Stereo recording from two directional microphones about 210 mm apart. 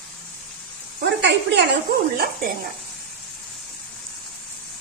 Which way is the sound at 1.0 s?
55° right (ahead or behind).